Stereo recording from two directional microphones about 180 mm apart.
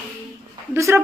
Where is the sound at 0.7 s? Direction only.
15° right (ahead or behind).